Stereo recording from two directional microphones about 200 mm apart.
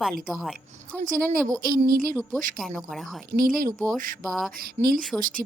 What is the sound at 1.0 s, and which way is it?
A woman's voice, 45° right (ahead or behind).